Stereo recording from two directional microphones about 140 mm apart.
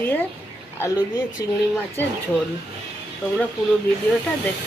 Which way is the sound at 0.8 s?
25° left (ahead or behind).